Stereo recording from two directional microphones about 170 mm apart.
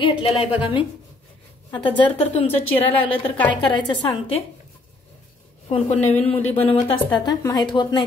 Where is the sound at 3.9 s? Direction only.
30° left (ahead or behind).